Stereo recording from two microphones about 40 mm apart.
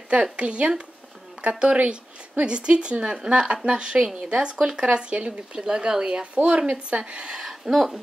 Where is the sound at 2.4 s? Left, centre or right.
Right.